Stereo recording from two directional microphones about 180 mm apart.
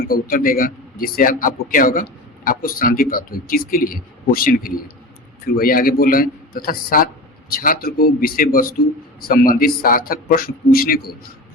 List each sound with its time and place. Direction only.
0.1 s a man's voice: 55° left (ahead or behind)